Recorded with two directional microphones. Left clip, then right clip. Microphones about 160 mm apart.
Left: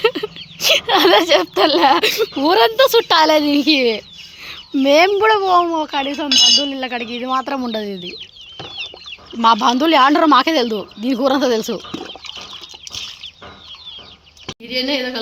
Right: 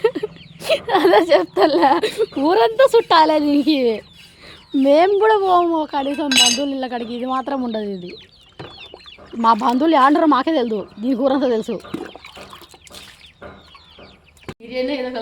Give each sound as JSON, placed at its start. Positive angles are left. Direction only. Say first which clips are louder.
{"t": 0.0, "sound": "a sound", "louder": "left 2 dB", "side_deg": -10}
{"t": 0.6, "sound": "speech", "louder": "left 3 dB", "side_deg": -10}
{"t": 4.4, "sound": "chicken", "louder": "even", "side_deg": -10}
{"t": 5.4, "sound": "speech", "louder": "left 1 dB", "side_deg": 0}
{"t": 5.6, "sound": "speech", "louder": "even", "side_deg": -20}
{"t": 6.1, "sound": "speech", "louder": "left 3 dB", "side_deg": -10}
{"t": 6.7, "sound": "speech", "louder": "left 1 dB", "side_deg": -25}
{"t": 8.8, "sound": "duck", "louder": "left 8 dB", "side_deg": -10}
{"t": 9.7, "sound": "speech", "louder": "left 1 dB", "side_deg": -10}
{"t": 14.7, "sound": "speech", "louder": "left 3 dB", "side_deg": 10}